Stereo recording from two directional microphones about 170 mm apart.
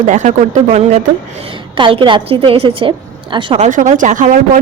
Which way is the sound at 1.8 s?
30° right (ahead or behind).